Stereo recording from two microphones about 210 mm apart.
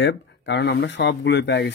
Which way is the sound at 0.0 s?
55° left (ahead or behind).